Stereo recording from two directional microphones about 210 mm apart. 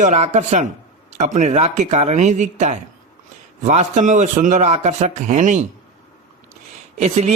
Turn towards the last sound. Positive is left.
turn(degrees=-30)  # may be behind; listen again after turning